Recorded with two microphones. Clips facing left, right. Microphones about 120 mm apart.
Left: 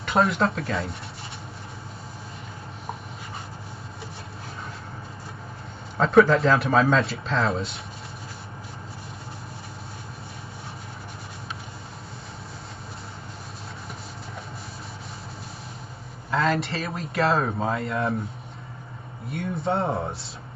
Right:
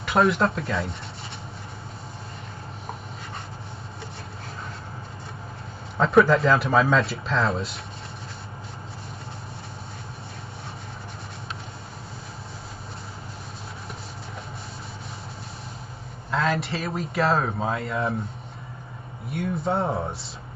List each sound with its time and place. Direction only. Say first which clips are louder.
0.0 s a man's voice: right 1 dB; centre (ahead or behind)
5.9 s a man's voice: left 1 dB; centre (ahead or behind)
16.3 s a man's voice: left 1 dB; centre (ahead or behind)
19.3 s a man's voice: right 1 dB; centre (ahead or behind)